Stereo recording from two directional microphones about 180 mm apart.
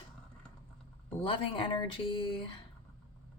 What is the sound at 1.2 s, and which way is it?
Speech, 30° left (ahead or behind).